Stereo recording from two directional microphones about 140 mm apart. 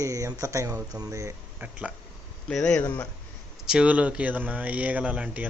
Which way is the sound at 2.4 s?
5° left (ahead or behind).